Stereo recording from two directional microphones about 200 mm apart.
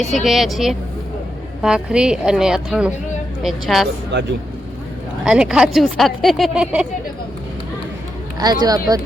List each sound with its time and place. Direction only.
0.1 s speech: centre (ahead or behind)
4.1 s speech: 60° right (ahead or behind)
5.2 s speech: 5° right (ahead or behind)
8.6 s speech: 20° right (ahead or behind)